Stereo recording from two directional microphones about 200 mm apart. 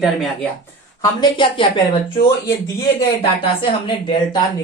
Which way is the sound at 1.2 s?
25° left (ahead or behind).